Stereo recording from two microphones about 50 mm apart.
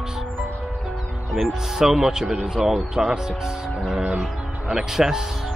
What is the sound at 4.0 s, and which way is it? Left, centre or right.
Music, right.